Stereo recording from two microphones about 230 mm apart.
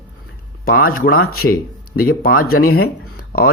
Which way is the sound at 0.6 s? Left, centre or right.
Left.